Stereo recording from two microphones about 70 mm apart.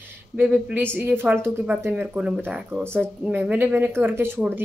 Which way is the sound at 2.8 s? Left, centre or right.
Right.